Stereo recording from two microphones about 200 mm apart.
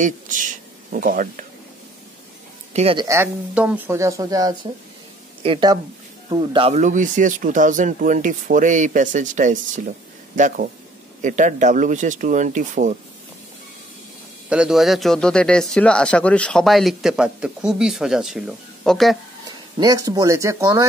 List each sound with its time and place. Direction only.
0.0 s a sound: 40° right (ahead or behind)
2.7 s speech: 30° right (ahead or behind)
3.1 s speech: 10° right (ahead or behind); by 12.9 s 40° right (ahead or behind)
14.5 s a man's voice: 5° right (ahead or behind)
19.8 s speech: 20° right (ahead or behind)